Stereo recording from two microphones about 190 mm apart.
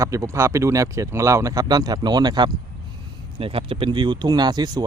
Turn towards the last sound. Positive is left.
turn(degrees=-20)  # may be behind; listen again after turning